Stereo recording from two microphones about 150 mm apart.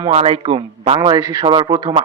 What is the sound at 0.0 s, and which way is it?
Speech, 45° right (ahead or behind).